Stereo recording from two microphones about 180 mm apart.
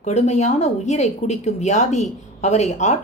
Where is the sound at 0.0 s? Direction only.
40° left (ahead or behind).